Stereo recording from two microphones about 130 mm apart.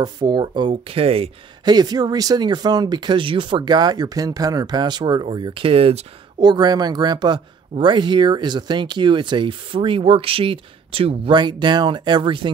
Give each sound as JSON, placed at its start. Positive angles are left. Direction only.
{"t": 0.0, "sound": "speech", "side_deg": -35}
{"t": 1.6, "sound": "speech", "side_deg": -35}
{"t": 6.4, "sound": "speech", "side_deg": -35}